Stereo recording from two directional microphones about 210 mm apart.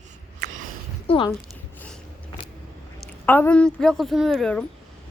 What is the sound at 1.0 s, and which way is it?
Speech, 25° left (ahead or behind).